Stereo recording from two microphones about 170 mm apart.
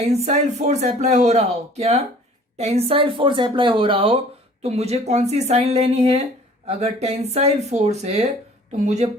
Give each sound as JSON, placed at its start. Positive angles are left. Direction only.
{"t": 0.1, "sound": "speech", "side_deg": -40}